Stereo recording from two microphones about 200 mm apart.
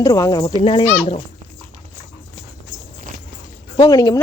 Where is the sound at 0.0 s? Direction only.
20° left (ahead or behind).